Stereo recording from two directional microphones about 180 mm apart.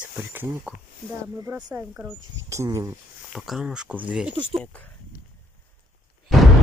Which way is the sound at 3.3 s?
5° right (ahead or behind).